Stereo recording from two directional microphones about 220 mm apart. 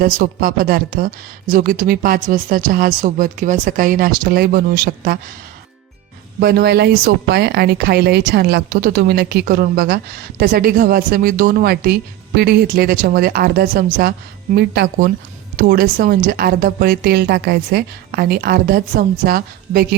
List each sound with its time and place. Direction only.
0.0 s speech: 40° right (ahead or behind)
6.4 s speech: 45° right (ahead or behind)